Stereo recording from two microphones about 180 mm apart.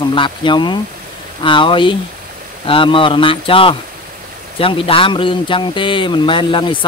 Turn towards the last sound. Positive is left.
turn(degrees=25)  # may be behind; listen again after turning